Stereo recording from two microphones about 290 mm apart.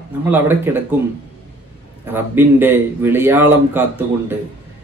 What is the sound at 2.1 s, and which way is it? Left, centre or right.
A man's voice, centre.